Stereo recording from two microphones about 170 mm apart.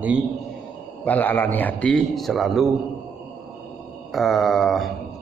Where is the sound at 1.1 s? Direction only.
10° left (ahead or behind).